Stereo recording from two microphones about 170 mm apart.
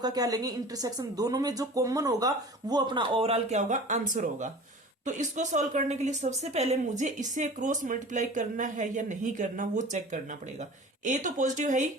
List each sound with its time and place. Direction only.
0.0 s a woman's voice: 20° right (ahead or behind); by 11.9 s 45° right (ahead or behind)